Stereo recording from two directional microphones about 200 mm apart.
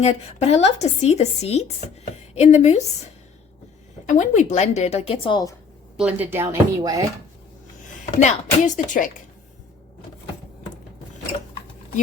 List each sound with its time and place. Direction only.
0.0 s speech: 35° left (ahead or behind)
4.0 s speech: 40° left (ahead or behind); by 5.5 s 20° left (ahead or behind)
6.0 s speech: 5° right (ahead or behind)
8.2 s speech: 35° left (ahead or behind)